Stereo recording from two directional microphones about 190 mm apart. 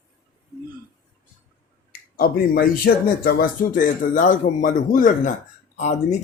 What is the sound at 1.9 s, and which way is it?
Speech, 50° left (ahead or behind).